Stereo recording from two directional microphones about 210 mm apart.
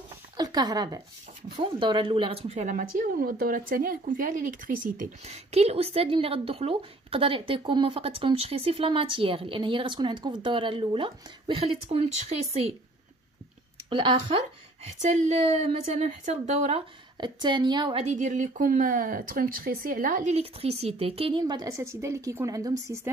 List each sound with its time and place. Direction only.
0.4 s speech: 20° right (ahead or behind)
13.8 s speech: 20° right (ahead or behind)
15.9 s speech: 30° right (ahead or behind); by 22.9 s 15° right (ahead or behind)